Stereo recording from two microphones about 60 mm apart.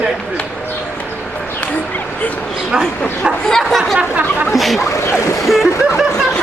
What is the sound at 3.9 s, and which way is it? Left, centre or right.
Speech, right.